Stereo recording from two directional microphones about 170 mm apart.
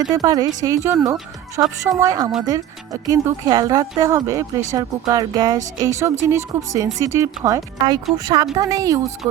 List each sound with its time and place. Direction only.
0.1 s speech: 20° right (ahead or behind)